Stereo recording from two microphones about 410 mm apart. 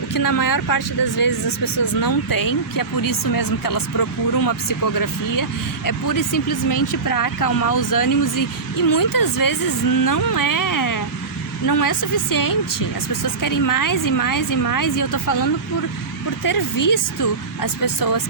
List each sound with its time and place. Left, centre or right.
0.1 s speech: left